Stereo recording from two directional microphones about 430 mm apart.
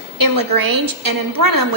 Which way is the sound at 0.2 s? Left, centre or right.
Right.